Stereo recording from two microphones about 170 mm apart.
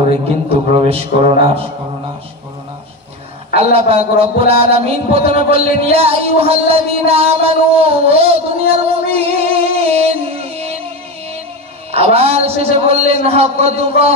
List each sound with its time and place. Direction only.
0.1 s music: 35° right (ahead or behind)
3.5 s music: 35° right (ahead or behind)
11.9 s music: 35° right (ahead or behind)